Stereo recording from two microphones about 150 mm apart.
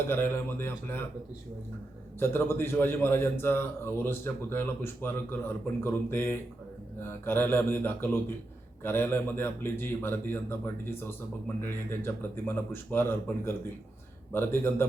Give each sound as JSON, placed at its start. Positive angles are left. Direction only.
{"t": 0.1, "sound": "a man's voice", "side_deg": 15}
{"t": 2.1, "sound": "a man's voice", "side_deg": 15}